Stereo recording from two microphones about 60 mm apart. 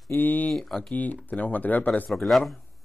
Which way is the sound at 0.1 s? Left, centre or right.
Left.